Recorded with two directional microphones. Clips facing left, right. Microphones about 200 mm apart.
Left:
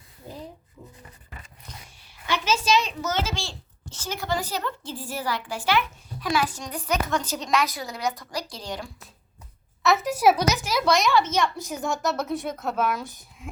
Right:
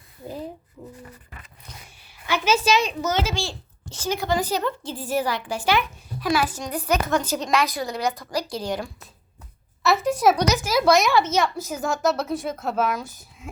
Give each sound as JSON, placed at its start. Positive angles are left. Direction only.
{"t": 0.8, "sound": "a sound", "side_deg": -30}
{"t": 2.5, "sound": "a child's voice", "side_deg": -10}
{"t": 6.1, "sound": "a child's voice", "side_deg": -5}
{"t": 9.8, "sound": "a child's voice", "side_deg": 0}